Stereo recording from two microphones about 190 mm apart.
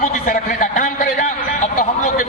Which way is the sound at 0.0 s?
45° left (ahead or behind).